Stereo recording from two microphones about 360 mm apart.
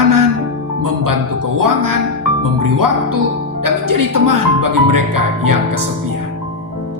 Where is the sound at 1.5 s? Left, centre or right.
Right.